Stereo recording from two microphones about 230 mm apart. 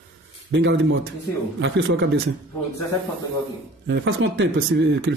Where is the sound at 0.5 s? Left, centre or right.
Right.